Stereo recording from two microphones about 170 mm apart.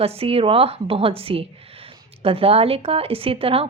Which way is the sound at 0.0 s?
35° right (ahead or behind).